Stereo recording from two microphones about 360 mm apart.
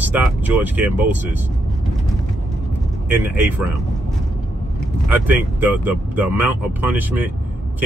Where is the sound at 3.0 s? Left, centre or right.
Centre.